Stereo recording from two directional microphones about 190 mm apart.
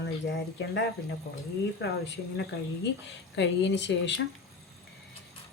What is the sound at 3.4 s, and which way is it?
Speech, 70° left (ahead or behind).